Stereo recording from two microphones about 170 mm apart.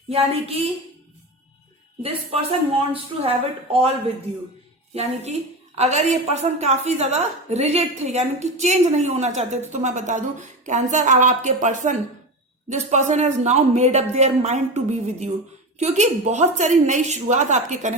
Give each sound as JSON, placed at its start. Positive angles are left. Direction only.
{"t": 0.1, "sound": "a woman's voice", "side_deg": -35}
{"t": 2.0, "sound": "a woman's voice", "side_deg": -35}
{"t": 4.9, "sound": "a woman's voice", "side_deg": -40}